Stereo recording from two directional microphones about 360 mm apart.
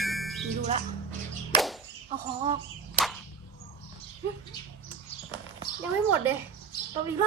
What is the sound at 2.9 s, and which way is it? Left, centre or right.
Whip, centre.